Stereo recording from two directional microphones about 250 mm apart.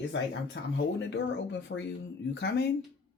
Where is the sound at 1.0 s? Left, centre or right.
Left.